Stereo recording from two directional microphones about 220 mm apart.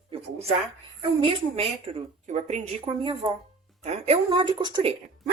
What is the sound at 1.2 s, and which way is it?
A woman's voice, 25° right (ahead or behind).